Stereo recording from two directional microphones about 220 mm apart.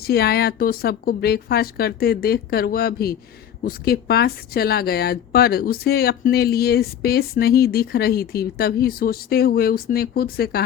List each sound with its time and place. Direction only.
0.0 s a woman's voice: 45° left (ahead or behind)